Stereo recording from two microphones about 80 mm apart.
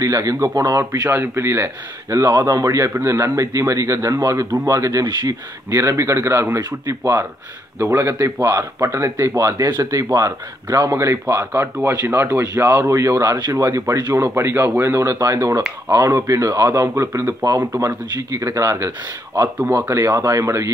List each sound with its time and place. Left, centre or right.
0.0 s speech: right
1.0 s a man's voice: right
9.6 s a man's voice: right